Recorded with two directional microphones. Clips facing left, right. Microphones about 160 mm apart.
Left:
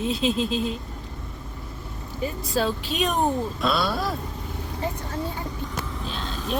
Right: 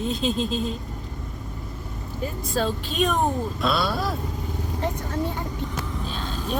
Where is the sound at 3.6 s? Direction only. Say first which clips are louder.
Right 1 dB; centre (ahead or behind).